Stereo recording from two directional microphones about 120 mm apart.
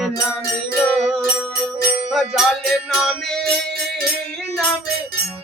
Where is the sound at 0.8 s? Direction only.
5° left (ahead or behind).